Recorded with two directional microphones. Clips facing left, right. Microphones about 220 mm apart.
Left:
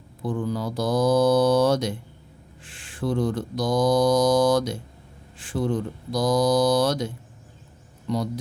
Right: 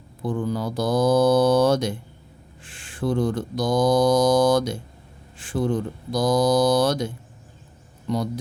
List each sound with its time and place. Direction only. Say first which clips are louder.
0.3 s mantra: right 1 dB; 50° right (ahead or behind)
8.0 s speech: right 1 dB; 50° right (ahead or behind)